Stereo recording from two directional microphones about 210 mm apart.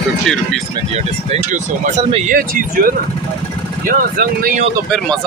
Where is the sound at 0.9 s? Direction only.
35° right (ahead or behind).